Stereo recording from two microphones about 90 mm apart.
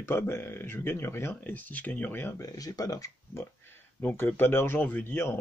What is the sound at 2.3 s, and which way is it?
Speech, 40° left (ahead or behind).